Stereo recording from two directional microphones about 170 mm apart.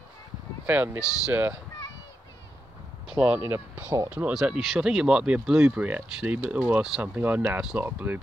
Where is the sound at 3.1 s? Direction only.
5° right (ahead or behind).